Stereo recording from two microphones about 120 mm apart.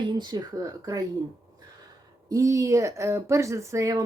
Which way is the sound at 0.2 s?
35° right (ahead or behind).